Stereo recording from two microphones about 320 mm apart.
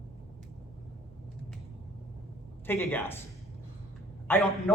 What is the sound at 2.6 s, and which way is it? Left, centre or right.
Speech, centre.